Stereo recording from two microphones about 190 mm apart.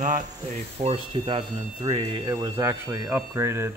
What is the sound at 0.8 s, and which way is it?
Speech, 30° right (ahead or behind).